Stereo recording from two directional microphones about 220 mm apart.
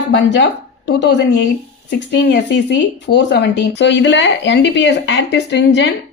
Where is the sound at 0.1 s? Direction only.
55° left (ahead or behind).